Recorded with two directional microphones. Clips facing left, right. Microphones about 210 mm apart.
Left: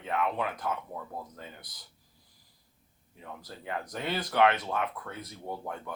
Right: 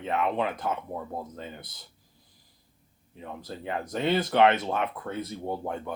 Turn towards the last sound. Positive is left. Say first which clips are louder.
# right 6 dB
turn(degrees=-25)  # may be behind; listen again after turning